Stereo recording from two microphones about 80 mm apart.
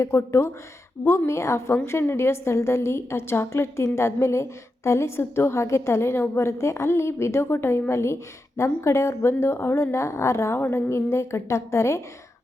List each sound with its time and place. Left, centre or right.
0.0 s a woman's voice: left